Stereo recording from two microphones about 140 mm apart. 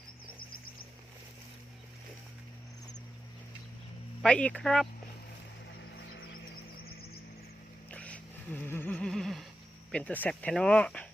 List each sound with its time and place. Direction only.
0.3 s bird: 90° left
4.2 s speech: 10° left (ahead or behind)
7.9 s neigh: 10° left (ahead or behind)
9.9 s speech: 10° left (ahead or behind)